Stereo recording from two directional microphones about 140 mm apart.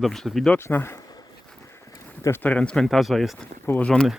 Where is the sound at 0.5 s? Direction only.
15° left (ahead or behind).